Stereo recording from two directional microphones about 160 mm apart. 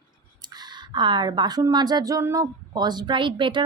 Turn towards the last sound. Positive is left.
turn(degrees=-30)  # may be behind; listen again after turning